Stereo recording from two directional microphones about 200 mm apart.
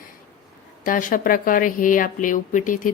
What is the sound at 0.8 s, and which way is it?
Speech, 45° left (ahead or behind).